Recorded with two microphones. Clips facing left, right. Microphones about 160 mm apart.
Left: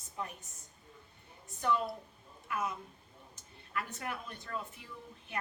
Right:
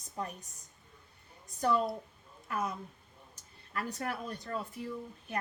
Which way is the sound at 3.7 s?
35° right (ahead or behind).